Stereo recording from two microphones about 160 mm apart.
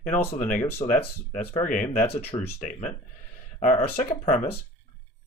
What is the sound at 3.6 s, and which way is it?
Speech, 45° left (ahead or behind).